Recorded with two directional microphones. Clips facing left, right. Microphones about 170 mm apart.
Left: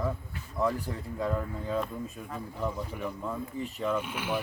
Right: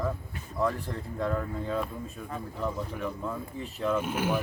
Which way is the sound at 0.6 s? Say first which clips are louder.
Even; 5° left (ahead or behind).